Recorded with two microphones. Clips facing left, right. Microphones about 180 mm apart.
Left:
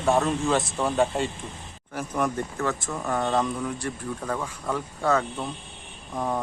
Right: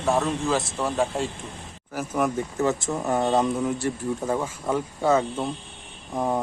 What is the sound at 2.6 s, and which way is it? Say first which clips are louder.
Speech: right 6 dB; 25° right (ahead or behind).